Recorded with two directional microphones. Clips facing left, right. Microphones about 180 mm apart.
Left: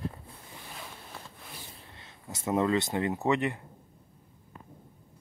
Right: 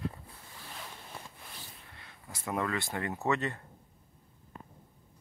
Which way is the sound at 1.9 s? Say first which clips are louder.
Left 6 dB; 25° left (ahead or behind).